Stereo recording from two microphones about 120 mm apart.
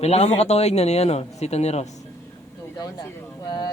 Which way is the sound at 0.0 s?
60° left (ahead or behind).